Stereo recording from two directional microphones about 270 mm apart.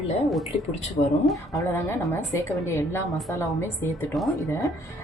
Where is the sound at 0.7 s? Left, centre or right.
Left.